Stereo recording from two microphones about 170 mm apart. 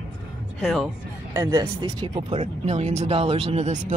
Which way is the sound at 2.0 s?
35° right (ahead or behind).